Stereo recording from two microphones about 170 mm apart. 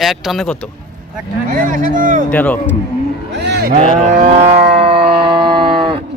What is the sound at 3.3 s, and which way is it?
Speech, 80° right.